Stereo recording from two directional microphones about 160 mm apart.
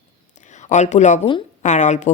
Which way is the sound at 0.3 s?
50° left (ahead or behind).